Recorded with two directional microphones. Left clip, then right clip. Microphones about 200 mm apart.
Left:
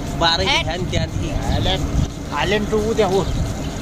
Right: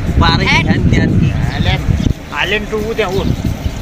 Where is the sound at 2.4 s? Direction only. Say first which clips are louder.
Right 1 dB; 65° left (ahead or behind).